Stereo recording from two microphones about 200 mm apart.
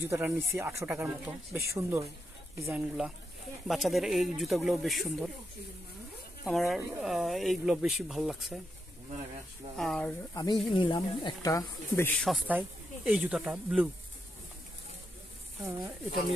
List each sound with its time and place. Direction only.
0.1 s speech: 10° right (ahead or behind)
3.6 s speech: centre (ahead or behind)
6.4 s speech: centre (ahead or behind)
9.8 s speech: 5° left (ahead or behind)
10.3 s speech: 20° left (ahead or behind); by 12.4 s 5° left (ahead or behind)
12.4 s speech: 5° right (ahead or behind)